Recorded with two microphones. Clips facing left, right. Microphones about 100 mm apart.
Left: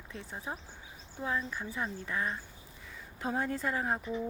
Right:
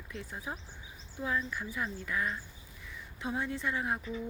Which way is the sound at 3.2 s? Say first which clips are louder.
Left 2 dB; 40° left (ahead or behind).